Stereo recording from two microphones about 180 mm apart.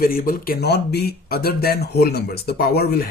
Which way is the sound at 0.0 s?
55° left (ahead or behind).